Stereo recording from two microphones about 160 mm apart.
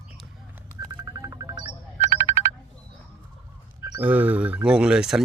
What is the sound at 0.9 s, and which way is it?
Music, 25° right (ahead or behind).